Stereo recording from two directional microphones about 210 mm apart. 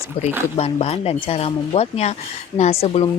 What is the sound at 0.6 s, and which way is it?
Speech, 30° left (ahead or behind).